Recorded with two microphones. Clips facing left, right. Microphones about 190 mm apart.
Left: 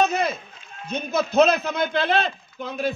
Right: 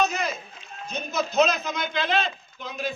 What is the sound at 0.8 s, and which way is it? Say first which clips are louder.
A man's voice: left 4 dB; 55° left (ahead or behind).